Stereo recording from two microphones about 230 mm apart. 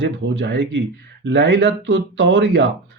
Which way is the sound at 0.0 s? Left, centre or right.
Right.